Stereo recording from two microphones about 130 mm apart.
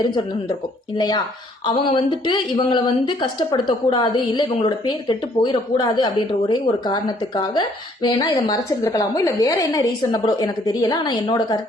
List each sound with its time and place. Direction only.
0.9 s a woman's voice: 30° left (ahead or behind)